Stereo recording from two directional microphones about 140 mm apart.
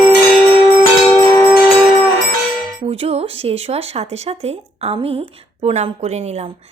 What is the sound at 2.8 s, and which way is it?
A woman's voice, 45° right (ahead or behind).